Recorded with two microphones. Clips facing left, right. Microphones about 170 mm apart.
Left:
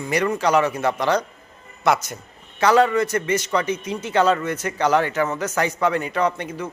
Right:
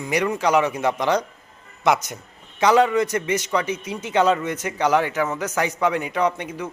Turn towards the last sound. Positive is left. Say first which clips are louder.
# even
turn(degrees=-15)  # may be behind; listen again after turning